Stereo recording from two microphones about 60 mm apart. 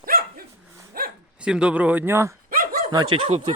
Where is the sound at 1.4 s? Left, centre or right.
Centre.